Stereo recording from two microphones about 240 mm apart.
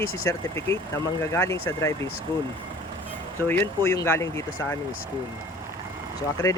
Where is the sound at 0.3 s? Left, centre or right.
Centre.